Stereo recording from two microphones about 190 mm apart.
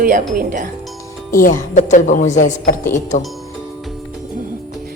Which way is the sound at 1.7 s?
40° left (ahead or behind).